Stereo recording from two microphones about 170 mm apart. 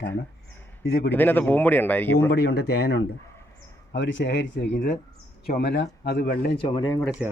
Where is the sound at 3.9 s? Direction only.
90° left.